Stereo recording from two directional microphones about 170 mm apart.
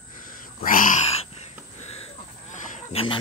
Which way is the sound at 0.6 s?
55° left (ahead or behind).